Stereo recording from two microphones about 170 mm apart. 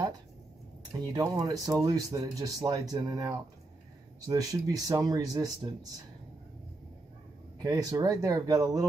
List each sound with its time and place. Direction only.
1.1 s speech: 25° right (ahead or behind)
7.6 s speech: 20° right (ahead or behind)